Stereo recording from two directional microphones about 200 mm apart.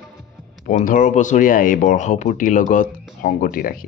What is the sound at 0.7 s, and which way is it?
Speech, 40° left (ahead or behind).